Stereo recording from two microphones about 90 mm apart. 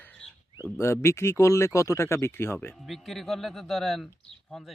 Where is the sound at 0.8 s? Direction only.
30° left (ahead or behind).